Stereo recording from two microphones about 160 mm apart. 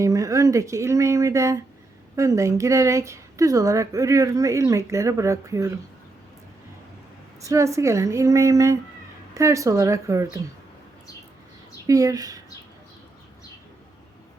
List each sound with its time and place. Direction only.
0.0 s speech: 20° right (ahead or behind)
7.4 s speech: 20° right (ahead or behind)
11.9 s speech: 20° right (ahead or behind)